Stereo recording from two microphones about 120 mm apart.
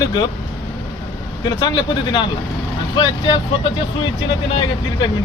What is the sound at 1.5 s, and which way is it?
A man's voice, 40° left (ahead or behind).